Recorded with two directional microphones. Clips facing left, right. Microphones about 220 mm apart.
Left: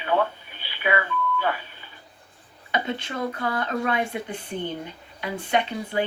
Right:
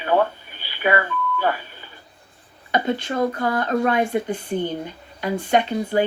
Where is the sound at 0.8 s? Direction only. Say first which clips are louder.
Right 4 dB; 40° right (ahead or behind).